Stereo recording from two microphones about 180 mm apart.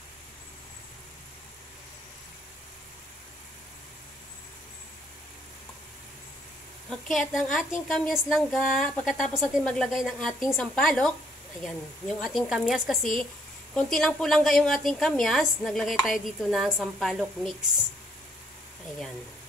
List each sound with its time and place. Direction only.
6.9 s a woman's voice: centre (ahead or behind)